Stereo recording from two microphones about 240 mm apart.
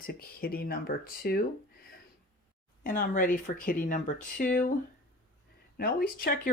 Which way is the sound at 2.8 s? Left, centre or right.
Left.